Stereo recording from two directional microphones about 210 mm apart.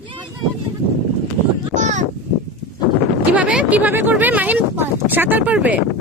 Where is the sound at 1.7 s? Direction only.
35° right (ahead or behind).